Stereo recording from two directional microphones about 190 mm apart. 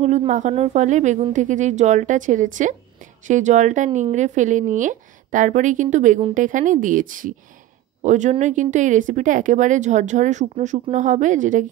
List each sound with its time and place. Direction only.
0.0 s speech: 35° right (ahead or behind)